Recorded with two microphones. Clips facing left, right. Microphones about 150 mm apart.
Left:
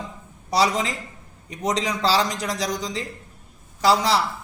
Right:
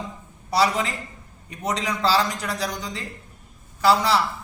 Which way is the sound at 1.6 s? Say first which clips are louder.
Left 1 dB; 35° left (ahead or behind).